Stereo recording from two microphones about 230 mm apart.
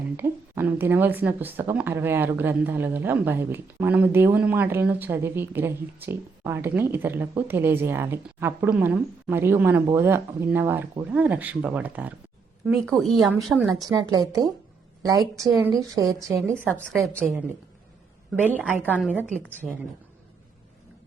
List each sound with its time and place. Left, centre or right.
0.2 s speech: centre
13.8 s speech: centre
15.5 s speech: centre
16.6 s speech: centre
18.4 s speech: centre
18.9 s speech: centre
19.5 s speech: centre